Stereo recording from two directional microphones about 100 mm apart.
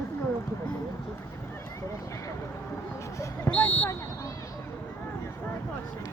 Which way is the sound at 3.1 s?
30° left (ahead or behind).